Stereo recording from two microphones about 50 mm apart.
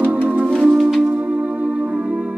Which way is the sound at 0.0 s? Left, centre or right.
Right.